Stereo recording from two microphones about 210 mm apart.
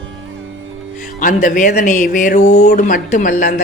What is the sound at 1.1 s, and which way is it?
Speech, 40° left (ahead or behind).